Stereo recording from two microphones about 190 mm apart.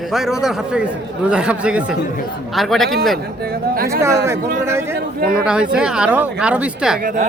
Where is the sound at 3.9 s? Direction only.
15° right (ahead or behind).